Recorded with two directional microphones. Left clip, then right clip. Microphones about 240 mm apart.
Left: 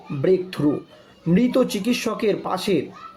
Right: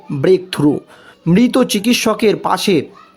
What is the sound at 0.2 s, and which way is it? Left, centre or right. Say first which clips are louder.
A man's voice: right 7 dB; right.